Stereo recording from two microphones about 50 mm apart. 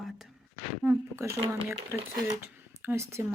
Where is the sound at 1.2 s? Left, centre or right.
Right.